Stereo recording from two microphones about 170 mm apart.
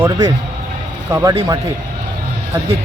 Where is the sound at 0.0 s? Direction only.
15° right (ahead or behind).